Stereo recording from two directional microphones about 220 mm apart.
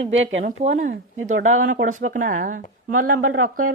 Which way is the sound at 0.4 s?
35° right (ahead or behind).